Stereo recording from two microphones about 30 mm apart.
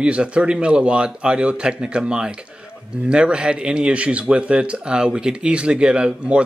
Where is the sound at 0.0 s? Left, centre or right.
Right.